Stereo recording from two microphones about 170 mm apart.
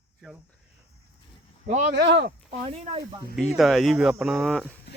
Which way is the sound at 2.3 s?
45° right (ahead or behind).